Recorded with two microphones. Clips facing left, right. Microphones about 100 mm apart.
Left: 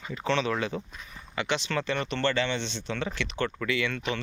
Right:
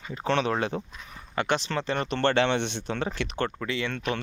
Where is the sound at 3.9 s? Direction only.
50° right (ahead or behind).